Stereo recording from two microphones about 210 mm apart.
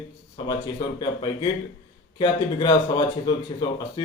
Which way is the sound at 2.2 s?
20° left (ahead or behind).